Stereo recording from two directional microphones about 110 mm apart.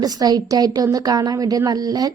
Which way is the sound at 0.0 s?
35° right (ahead or behind).